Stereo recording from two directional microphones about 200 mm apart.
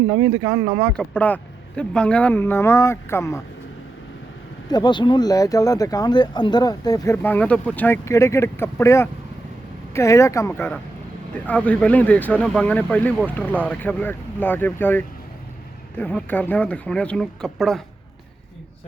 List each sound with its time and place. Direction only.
0.1 s speech: 15° right (ahead or behind)
0.9 s speech: 5° left (ahead or behind)
4.7 s speech: 20° left (ahead or behind); by 17.8 s centre (ahead or behind)